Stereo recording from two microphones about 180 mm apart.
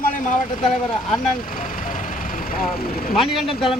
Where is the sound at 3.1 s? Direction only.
Centre (ahead or behind).